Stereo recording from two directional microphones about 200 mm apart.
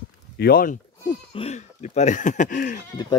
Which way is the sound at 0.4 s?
45° left (ahead or behind).